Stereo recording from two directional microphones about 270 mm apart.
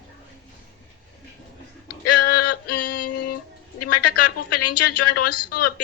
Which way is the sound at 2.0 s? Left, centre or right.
Left.